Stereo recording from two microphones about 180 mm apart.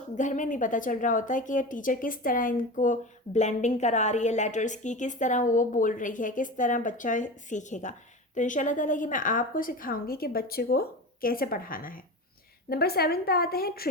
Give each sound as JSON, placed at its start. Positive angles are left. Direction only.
{"t": 0.2, "sound": "a woman's voice", "side_deg": 45}